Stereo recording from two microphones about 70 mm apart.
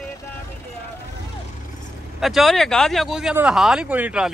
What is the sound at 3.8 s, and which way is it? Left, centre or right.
Speech, right.